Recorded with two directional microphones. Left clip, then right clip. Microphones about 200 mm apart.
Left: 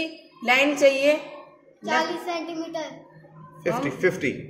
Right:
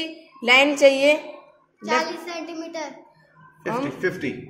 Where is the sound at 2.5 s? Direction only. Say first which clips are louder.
Even; 5° right (ahead or behind).